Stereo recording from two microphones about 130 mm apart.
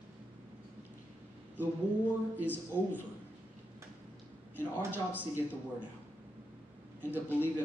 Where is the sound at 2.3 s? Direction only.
15° right (ahead or behind).